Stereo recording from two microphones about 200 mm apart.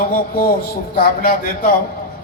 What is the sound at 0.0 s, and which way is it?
A man's voice, 45° left (ahead or behind).